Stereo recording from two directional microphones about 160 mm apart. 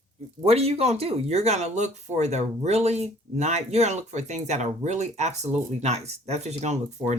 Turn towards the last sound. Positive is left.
turn(degrees=-45)  # may be behind; listen again after turning